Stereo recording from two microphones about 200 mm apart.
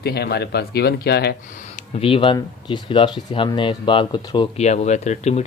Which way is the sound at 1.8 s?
30° left (ahead or behind).